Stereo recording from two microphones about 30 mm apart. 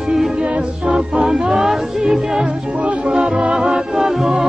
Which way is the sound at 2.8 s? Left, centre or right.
Right.